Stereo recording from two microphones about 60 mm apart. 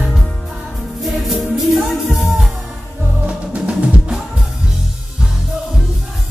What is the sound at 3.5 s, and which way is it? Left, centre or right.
Music, right.